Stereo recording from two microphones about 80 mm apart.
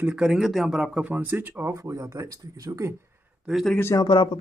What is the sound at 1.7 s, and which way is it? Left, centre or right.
Speech, right.